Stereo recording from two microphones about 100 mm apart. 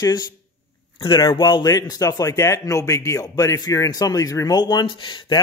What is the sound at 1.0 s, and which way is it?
Speech, 45° left (ahead or behind).